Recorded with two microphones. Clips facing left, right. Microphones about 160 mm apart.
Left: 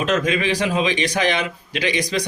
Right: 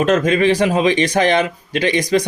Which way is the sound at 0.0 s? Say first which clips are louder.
Right 6 dB; 45° right (ahead or behind).